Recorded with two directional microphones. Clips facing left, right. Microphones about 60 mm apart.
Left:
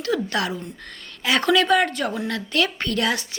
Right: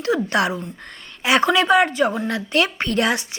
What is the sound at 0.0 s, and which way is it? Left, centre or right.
A woman's voice, right.